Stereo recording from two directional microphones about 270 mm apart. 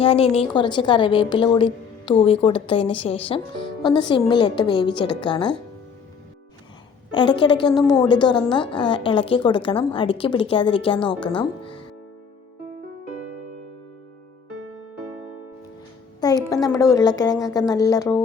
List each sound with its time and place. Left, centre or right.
0.0 s a woman's voice: left
7.1 s a woman's voice: centre
16.2 s a woman's voice: centre